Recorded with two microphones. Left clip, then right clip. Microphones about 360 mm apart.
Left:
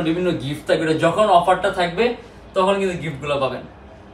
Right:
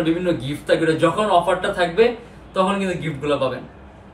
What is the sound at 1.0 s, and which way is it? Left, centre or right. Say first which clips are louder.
Speech: left 2 dB; centre.